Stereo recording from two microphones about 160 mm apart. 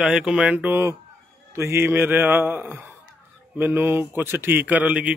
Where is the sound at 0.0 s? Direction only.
5° right (ahead or behind).